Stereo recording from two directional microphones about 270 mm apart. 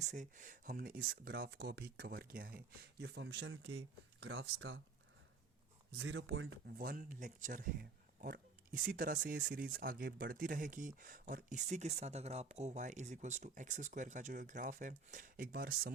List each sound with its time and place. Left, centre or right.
0.0 s speech: right
6.0 s speech: right